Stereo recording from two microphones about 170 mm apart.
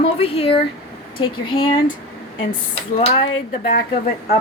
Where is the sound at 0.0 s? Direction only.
35° left (ahead or behind).